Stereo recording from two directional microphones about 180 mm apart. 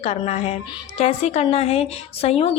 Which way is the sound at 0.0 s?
35° left (ahead or behind).